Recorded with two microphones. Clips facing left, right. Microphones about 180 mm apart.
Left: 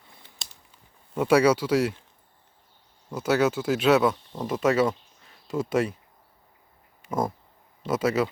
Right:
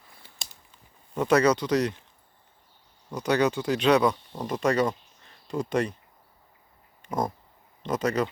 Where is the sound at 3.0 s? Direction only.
5° left (ahead or behind).